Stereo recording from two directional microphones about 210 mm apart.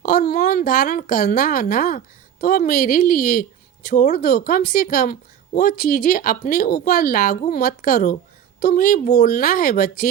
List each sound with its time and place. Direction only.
0.0 s speech: 45° left (ahead or behind)